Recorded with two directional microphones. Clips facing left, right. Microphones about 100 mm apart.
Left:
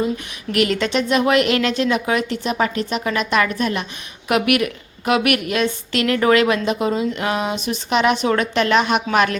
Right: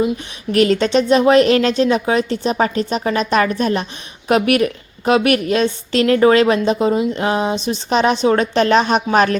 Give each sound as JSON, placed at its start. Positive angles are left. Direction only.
{"t": 0.5, "sound": "a woman's voice", "side_deg": -35}